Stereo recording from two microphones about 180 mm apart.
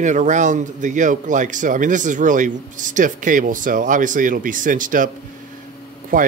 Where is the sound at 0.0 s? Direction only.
45° right (ahead or behind).